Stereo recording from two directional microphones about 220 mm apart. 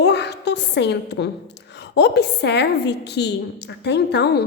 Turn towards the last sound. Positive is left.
turn(degrees=50)  # may be behind; listen again after turning